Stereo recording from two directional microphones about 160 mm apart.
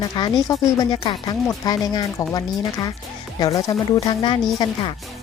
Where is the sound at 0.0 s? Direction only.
25° left (ahead or behind).